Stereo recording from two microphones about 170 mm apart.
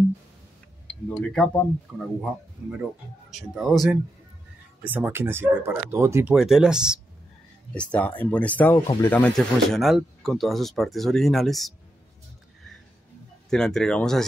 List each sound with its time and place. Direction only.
1.0 s speech: 5° left (ahead or behind)
4.8 s speech: 10° right (ahead or behind)
6.3 s speech: centre (ahead or behind)
7.7 s speech: 5° left (ahead or behind)
8.7 s speech: 20° left (ahead or behind)
9.1 s speech: 5° left (ahead or behind)
13.5 s speech: 5° left (ahead or behind)